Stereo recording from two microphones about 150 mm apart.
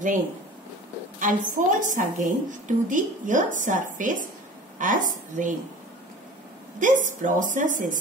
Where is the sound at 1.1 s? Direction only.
60° right (ahead or behind).